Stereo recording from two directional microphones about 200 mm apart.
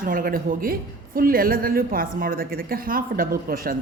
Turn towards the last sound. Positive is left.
turn(degrees=-45)  # may be behind; listen again after turning